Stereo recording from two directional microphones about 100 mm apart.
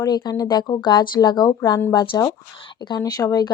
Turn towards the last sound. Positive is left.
turn(degrees=40)  # may be behind; listen again after turning